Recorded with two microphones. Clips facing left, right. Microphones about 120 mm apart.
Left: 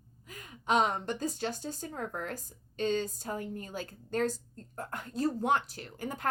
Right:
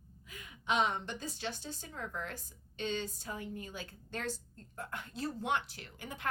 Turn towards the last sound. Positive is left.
turn(degrees=40)  # may be behind; listen again after turning